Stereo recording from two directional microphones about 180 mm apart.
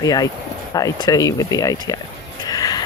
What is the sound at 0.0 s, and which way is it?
Speech, 20° left (ahead or behind).